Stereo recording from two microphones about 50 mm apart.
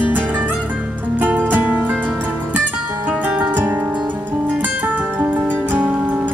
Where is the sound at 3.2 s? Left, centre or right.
Right.